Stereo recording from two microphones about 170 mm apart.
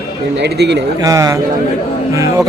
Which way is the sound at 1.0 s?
20° right (ahead or behind).